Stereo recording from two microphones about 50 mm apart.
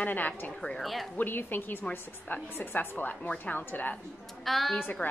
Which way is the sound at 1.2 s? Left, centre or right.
Left.